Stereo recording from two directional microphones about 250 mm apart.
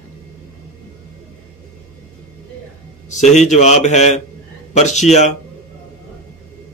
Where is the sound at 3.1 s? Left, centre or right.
Left.